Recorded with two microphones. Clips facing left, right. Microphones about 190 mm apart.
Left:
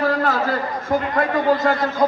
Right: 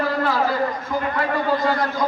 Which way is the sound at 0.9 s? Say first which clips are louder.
Left 3 dB; 50° left (ahead or behind).